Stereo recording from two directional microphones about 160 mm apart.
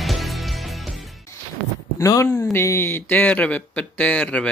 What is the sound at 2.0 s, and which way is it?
Speech, 20° left (ahead or behind).